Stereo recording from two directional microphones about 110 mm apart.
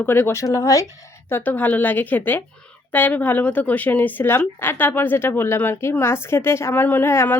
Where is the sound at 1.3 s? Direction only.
20° left (ahead or behind).